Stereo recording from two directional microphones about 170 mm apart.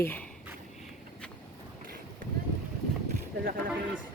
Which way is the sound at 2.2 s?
55° right (ahead or behind).